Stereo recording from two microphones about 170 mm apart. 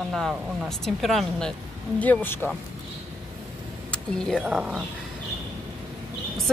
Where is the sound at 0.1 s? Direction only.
Centre (ahead or behind).